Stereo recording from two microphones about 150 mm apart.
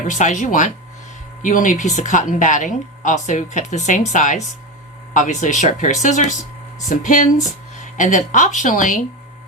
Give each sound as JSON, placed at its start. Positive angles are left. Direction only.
{"t": 0.1, "sound": "speech", "side_deg": 55}